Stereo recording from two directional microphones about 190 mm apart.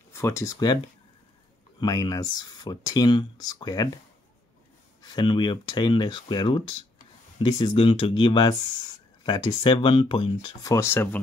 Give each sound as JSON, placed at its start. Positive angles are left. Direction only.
{"t": 0.1, "sound": "speech", "side_deg": 15}
{"t": 1.8, "sound": "speech", "side_deg": 20}
{"t": 5.0, "sound": "speech", "side_deg": 25}